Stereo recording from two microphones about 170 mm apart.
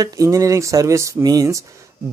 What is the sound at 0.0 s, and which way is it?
Speech, 20° right (ahead or behind).